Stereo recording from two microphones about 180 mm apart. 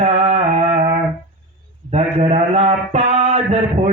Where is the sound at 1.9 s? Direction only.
35° right (ahead or behind).